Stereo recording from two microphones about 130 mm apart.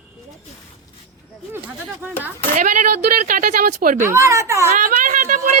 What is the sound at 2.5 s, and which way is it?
Speech, 80° right.